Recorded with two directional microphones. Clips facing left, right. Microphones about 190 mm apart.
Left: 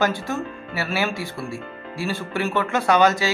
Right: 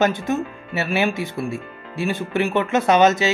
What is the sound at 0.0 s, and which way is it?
Speech, 20° right (ahead or behind).